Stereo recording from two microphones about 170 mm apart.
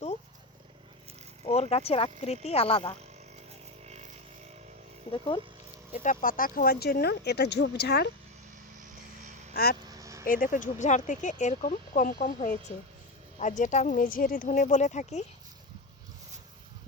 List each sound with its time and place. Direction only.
1.7 s speech: 35° left (ahead or behind)
3.8 s a sound: 40° right (ahead or behind)
5.1 s speech: 30° left (ahead or behind)
5.9 s speech: 50° left (ahead or behind); by 8.1 s 70° left (ahead or behind)
9.9 s vehicle: 20° right (ahead or behind)
10.2 s speech: 55° left (ahead or behind)